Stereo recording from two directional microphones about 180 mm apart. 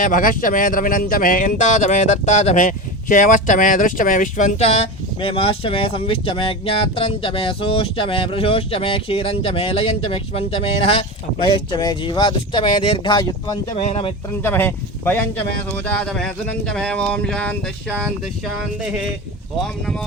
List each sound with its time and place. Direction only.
0.0 s speech: 50° left (ahead or behind); by 13.6 s 25° left (ahead or behind)
13.8 s speech: 35° left (ahead or behind)
14.4 s speech: 10° left (ahead or behind)
19.5 s speech: 5° left (ahead or behind)